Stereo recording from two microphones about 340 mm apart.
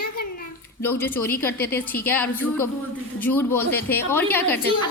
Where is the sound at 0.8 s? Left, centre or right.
Centre.